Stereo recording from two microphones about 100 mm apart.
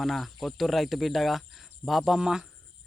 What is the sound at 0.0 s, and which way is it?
A man's voice, centre (ahead or behind).